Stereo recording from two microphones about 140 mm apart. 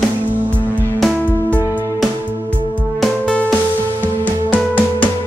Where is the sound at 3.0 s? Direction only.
5° left (ahead or behind).